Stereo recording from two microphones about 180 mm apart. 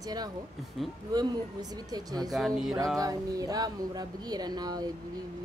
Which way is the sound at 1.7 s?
20° right (ahead or behind).